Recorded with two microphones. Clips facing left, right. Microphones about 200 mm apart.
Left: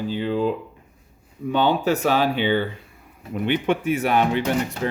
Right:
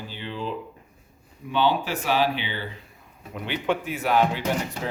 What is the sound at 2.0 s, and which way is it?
Speech, 45° left (ahead or behind).